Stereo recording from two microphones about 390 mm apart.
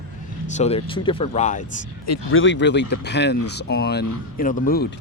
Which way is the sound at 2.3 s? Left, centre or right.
Left.